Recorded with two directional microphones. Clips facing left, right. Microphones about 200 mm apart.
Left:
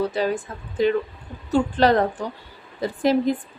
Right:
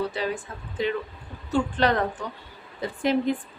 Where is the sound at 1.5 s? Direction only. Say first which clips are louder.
Left 5 dB; 35° left (ahead or behind).